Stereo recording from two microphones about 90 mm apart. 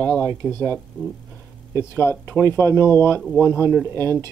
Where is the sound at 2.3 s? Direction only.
25° right (ahead or behind).